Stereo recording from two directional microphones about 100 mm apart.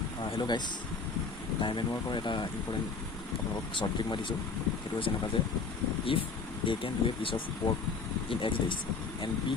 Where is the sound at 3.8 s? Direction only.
50° left (ahead or behind).